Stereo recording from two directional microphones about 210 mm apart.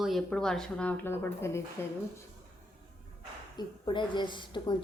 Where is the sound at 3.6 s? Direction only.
20° left (ahead or behind).